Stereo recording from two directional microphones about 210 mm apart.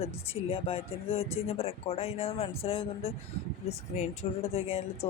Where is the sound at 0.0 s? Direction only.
25° left (ahead or behind).